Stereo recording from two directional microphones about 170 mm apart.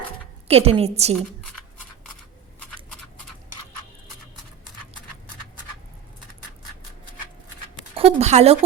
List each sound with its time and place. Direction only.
0.4 s a woman's voice: 35° right (ahead or behind)
7.9 s speech: 40° right (ahead or behind)